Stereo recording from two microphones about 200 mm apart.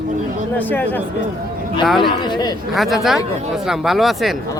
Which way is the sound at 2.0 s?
20° left (ahead or behind).